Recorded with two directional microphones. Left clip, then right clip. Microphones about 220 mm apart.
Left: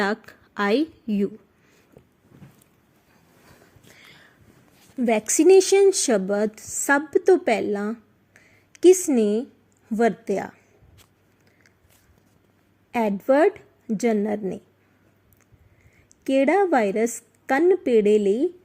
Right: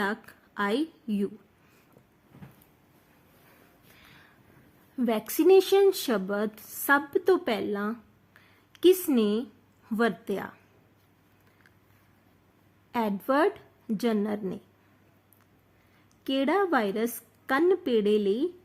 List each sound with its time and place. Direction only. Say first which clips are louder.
0.0 s a woman's voice: left 6 dB; 15° left (ahead or behind)
4.0 s a sound: left 5 dB; 25° left (ahead or behind)
4.9 s a woman's voice: left 7 dB; 10° left (ahead or behind)
8.7 s a sound: left 6 dB; 10° left (ahead or behind)
10.0 s a woman's voice: left 6 dB; 10° left (ahead or behind)
12.9 s a woman's voice: left 7 dB; 10° left (ahead or behind)
16.2 s a woman's voice: left 7 dB; 15° left (ahead or behind)